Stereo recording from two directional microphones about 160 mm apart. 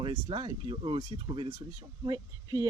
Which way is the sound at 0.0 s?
30° right (ahead or behind).